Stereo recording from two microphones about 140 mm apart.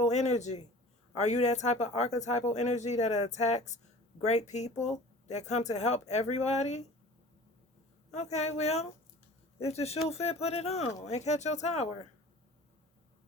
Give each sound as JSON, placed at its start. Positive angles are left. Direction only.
{"t": 0.0, "sound": "speech", "side_deg": 55}
{"t": 8.1, "sound": "speech", "side_deg": 55}